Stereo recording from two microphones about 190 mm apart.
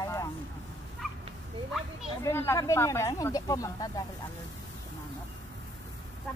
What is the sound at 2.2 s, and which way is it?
Speech, 15° left (ahead or behind).